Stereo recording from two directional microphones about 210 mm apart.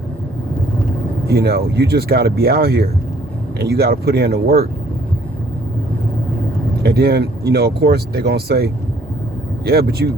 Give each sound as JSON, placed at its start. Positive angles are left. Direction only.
{"t": 1.3, "sound": "speech", "side_deg": -50}
{"t": 6.8, "sound": "speech", "side_deg": -50}